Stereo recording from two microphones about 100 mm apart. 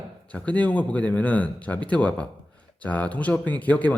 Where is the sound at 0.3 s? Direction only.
10° left (ahead or behind).